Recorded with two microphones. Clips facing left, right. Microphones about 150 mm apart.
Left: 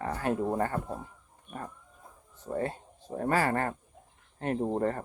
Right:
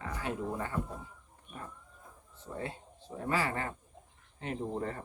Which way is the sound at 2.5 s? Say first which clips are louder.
Left 8 dB; 45° left (ahead or behind).